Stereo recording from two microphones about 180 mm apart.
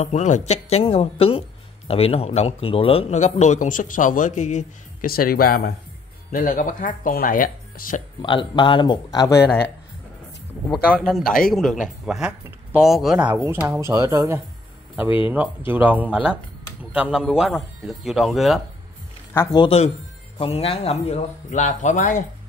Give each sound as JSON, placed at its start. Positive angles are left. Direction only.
{"t": 0.0, "sound": "a man's voice", "side_deg": 40}
{"t": 8.2, "sound": "speech", "side_deg": 25}
{"t": 11.1, "sound": "speech", "side_deg": 0}
{"t": 19.3, "sound": "speech", "side_deg": 15}
{"t": 19.6, "sound": "a man's voice", "side_deg": 35}